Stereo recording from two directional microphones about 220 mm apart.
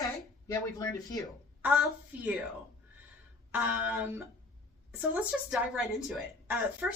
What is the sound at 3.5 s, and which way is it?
A woman's voice, 10° right (ahead or behind).